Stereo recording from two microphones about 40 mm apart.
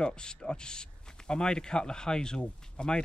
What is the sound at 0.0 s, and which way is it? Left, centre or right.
Speech, left.